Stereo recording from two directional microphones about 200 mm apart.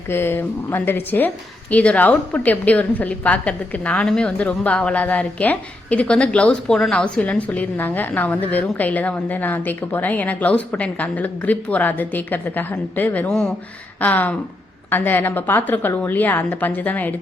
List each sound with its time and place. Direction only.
0.1 s a woman's voice: 10° left (ahead or behind)